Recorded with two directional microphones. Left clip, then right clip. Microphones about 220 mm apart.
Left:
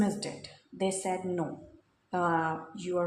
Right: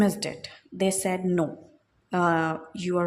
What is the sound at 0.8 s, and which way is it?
A woman's voice, 50° right (ahead or behind).